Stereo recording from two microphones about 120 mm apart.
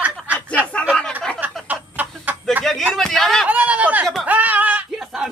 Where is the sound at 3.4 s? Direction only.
10° right (ahead or behind).